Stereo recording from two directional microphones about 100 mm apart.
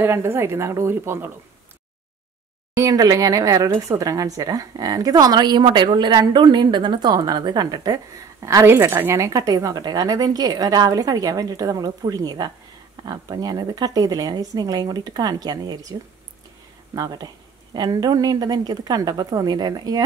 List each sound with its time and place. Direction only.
0.0 s speech: 25° right (ahead or behind)
2.8 s speech: 35° right (ahead or behind)
8.6 s speech: 20° right (ahead or behind); by 20.0 s 45° right (ahead or behind)